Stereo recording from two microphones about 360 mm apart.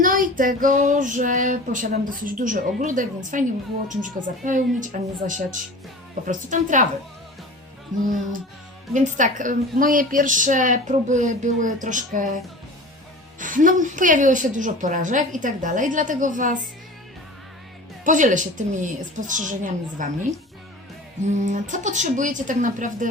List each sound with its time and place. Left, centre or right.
0.0 s a woman's voice: right
8.9 s a woman's voice: right
13.4 s a woman's voice: right
18.0 s a woman's voice: right
21.2 s a woman's voice: centre